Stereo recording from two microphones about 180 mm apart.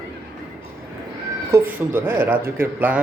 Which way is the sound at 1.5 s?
10° right (ahead or behind).